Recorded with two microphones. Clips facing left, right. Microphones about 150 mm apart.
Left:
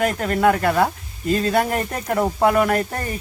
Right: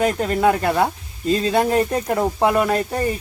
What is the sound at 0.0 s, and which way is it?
Speech, 20° right (ahead or behind).